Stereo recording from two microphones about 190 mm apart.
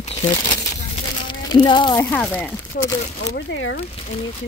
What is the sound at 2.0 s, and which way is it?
Speech, 5° left (ahead or behind).